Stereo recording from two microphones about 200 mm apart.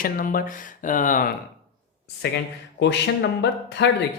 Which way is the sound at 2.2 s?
55° left (ahead or behind).